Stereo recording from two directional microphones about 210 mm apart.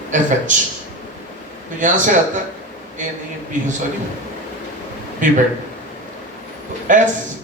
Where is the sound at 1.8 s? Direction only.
35° right (ahead or behind).